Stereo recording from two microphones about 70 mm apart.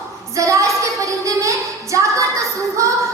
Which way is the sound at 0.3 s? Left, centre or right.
Right.